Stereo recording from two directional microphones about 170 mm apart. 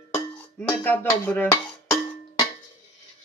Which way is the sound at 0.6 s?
10° left (ahead or behind).